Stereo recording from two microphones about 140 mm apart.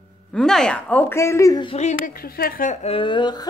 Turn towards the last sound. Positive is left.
turn(degrees=30)  # may be behind; listen again after turning